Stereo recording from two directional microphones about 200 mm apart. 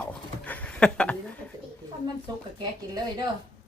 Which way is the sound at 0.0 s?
5° left (ahead or behind).